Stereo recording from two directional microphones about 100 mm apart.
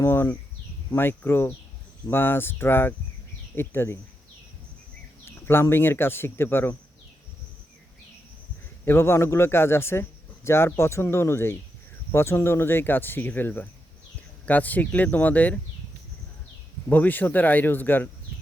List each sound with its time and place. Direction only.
0.0 s speech: 25° left (ahead or behind)
5.2 s speech: 25° left (ahead or behind)
8.8 s speech: 25° left (ahead or behind)
16.9 s speech: 15° left (ahead or behind)